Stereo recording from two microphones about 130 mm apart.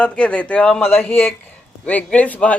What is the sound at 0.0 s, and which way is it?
Speech, 10° left (ahead or behind).